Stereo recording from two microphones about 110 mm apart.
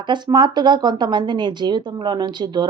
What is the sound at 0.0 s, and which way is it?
Speech, 45° right (ahead or behind).